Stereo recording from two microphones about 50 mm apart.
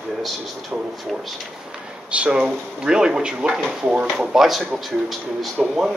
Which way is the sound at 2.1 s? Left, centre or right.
Right.